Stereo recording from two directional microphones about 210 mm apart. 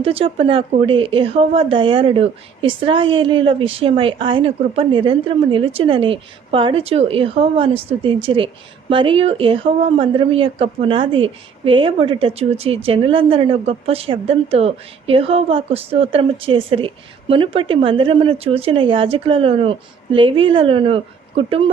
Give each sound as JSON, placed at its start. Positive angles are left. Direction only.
{"t": 0.0, "sound": "a woman's voice", "side_deg": -25}